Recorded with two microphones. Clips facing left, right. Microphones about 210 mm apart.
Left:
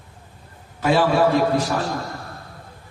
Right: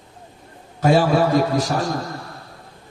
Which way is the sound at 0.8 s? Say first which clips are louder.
Right 1 dB; 40° right (ahead or behind).